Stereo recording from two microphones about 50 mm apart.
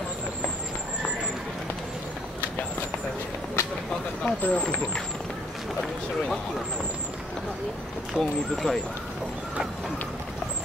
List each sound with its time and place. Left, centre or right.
3.6 s a sound: left
4.3 s speech: left
8.2 s speech: centre
8.6 s speech: centre